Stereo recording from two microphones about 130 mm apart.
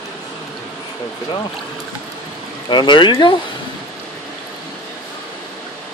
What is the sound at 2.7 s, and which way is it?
Speech, 35° left (ahead or behind).